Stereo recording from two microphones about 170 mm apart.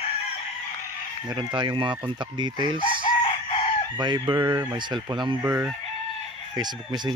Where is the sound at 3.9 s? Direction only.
25° right (ahead or behind).